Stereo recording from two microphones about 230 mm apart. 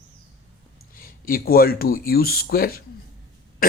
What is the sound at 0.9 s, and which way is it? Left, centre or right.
Speech, left.